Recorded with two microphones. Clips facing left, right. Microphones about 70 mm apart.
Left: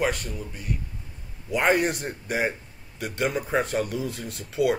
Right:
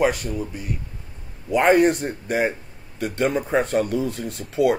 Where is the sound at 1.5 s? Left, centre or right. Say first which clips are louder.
Right 6 dB; centre.